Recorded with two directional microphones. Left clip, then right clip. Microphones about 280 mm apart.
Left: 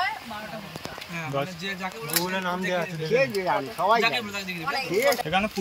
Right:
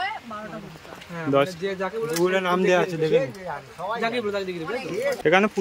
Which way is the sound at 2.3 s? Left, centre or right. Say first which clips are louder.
Right 9 dB; right.